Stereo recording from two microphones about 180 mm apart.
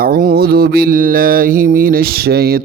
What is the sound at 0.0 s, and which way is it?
Mantra, 55° right (ahead or behind).